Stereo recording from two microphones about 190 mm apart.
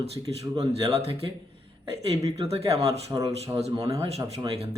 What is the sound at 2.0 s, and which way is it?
Speech, 30° right (ahead or behind).